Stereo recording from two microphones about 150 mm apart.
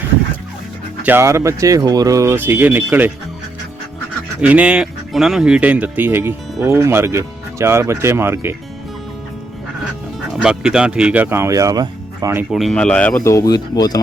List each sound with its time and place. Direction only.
1.0 s speech: 15° right (ahead or behind)
4.4 s speech: 10° right (ahead or behind)
10.3 s speech: 5° right (ahead or behind)
12.5 s speech: centre (ahead or behind)
13.3 s speech: 25° left (ahead or behind)